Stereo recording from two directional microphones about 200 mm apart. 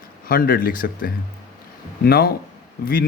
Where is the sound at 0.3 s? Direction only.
45° left (ahead or behind).